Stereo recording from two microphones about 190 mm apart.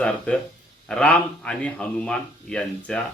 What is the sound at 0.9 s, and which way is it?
A man's voice, 5° left (ahead or behind).